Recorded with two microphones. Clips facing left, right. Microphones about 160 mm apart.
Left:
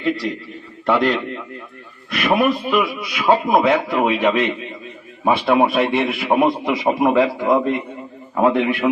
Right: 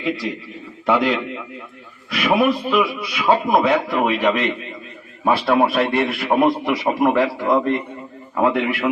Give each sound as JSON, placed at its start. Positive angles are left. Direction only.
{"t": 0.0, "sound": "a man's voice", "side_deg": 0}
{"t": 6.5, "sound": "a man's voice", "side_deg": 15}